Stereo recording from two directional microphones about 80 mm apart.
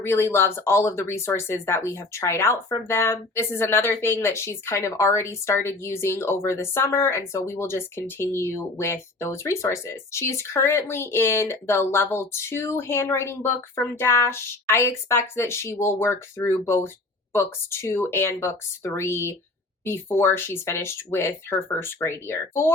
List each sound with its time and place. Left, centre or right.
0.0 s a woman's voice: left